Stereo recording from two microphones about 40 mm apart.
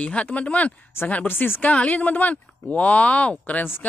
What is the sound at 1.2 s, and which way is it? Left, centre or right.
Speech, left.